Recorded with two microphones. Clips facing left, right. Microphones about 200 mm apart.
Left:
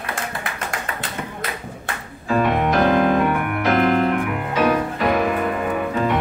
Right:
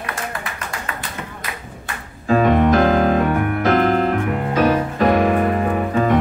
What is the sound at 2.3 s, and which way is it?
Music, 40° right (ahead or behind).